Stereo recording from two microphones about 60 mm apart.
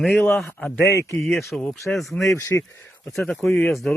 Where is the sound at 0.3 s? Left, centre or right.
Centre.